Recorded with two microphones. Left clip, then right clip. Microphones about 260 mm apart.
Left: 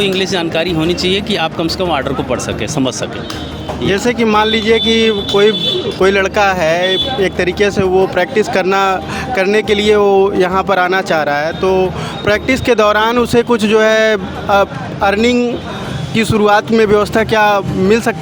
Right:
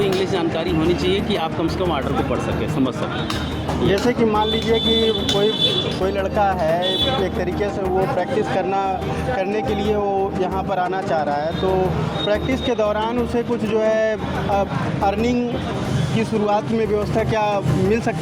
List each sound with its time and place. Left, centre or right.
0.0 s speech: left
3.8 s speech: left